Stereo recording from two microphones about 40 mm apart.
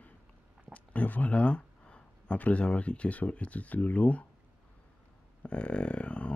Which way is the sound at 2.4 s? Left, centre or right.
Left.